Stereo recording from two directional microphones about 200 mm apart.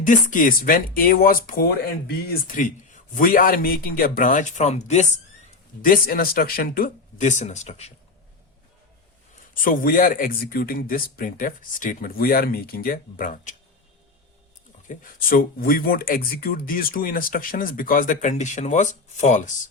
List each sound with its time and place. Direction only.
0.0 s speech: 40° left (ahead or behind)
5.8 s speech: 45° left (ahead or behind)
9.6 s speech: 45° left (ahead or behind)
14.8 s speech: 45° left (ahead or behind)